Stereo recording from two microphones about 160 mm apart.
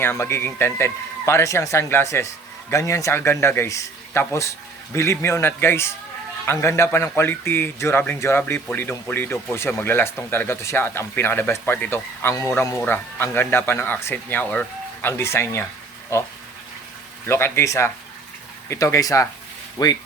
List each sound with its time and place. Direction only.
0.0 s speech: 15° left (ahead or behind)
17.2 s speech: 15° left (ahead or behind)